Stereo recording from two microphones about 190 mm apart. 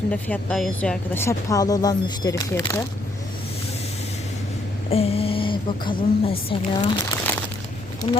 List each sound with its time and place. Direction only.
0.1 s a woman's voice: 5° left (ahead or behind)
4.9 s a woman's voice: 30° left (ahead or behind)